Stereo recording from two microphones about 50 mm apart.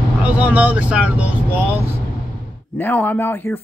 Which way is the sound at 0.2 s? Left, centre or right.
Right.